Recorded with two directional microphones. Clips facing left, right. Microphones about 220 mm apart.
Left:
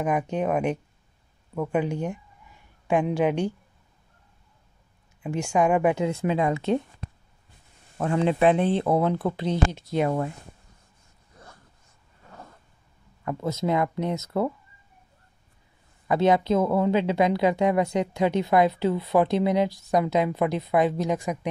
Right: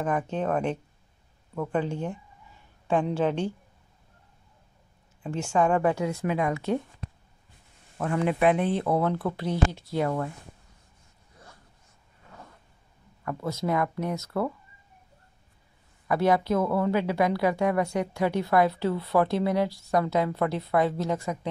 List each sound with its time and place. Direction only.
0.0 s a woman's voice: 15° left (ahead or behind)
5.2 s a woman's voice: 15° left (ahead or behind)
6.0 s speech: 25° left (ahead or behind)
8.0 s speech: 25° left (ahead or behind)
13.2 s speech: 20° left (ahead or behind)
16.1 s speech: 20° left (ahead or behind)